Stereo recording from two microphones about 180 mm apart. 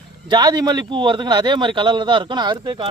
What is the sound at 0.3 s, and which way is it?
Speech, 25° right (ahead or behind).